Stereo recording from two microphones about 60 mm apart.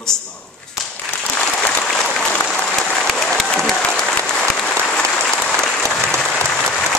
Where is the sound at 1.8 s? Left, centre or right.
Centre.